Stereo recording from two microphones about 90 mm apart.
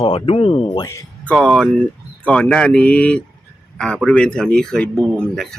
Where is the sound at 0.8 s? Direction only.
35° left (ahead or behind).